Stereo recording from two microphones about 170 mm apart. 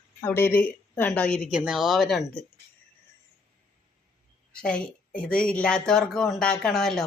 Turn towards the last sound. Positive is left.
turn(degrees=0)  # may be behind; listen again after turning